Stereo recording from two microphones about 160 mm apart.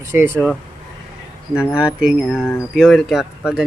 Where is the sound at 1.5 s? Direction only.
5° right (ahead or behind).